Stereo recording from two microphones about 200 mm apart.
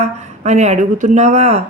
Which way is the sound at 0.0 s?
35° right (ahead or behind).